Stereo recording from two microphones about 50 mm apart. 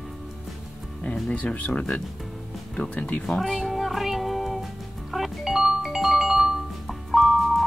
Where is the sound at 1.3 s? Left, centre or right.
Left.